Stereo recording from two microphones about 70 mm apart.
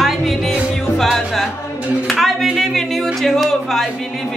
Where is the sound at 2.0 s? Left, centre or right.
Centre.